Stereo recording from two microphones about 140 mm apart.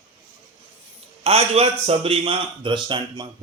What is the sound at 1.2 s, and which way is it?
A man's voice, 45° right (ahead or behind).